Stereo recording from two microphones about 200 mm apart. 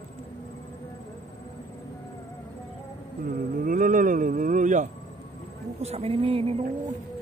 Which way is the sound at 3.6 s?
40° right (ahead or behind).